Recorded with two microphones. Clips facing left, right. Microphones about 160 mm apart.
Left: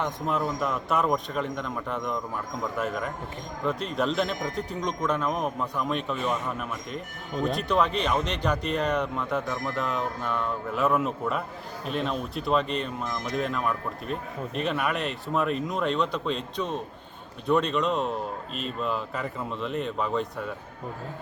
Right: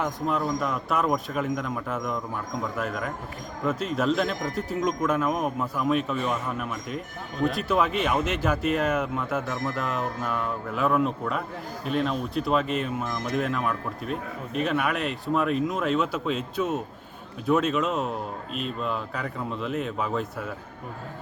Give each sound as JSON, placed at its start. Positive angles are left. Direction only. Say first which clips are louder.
{"t": 0.0, "sound": "speech", "louder": "right 1 dB", "side_deg": 0}